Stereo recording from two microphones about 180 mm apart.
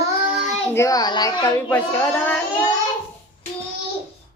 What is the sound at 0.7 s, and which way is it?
A child's voice, 20° left (ahead or behind).